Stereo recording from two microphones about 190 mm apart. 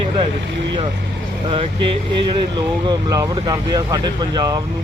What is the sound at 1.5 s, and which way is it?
Speech, 25° right (ahead or behind).